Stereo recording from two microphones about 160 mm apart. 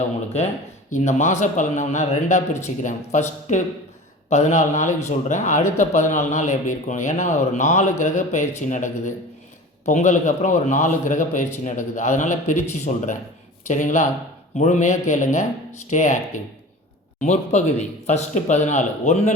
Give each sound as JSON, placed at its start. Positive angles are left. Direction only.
{"t": 0.9, "sound": "speech", "side_deg": 50}